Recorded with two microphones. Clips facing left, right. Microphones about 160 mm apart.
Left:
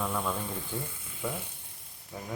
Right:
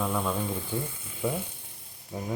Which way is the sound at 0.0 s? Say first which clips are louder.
Right 3 dB; 10° right (ahead or behind).